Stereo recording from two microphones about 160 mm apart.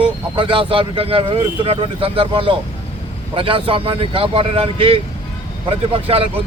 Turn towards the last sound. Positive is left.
turn(degrees=-35)  # may be behind; listen again after turning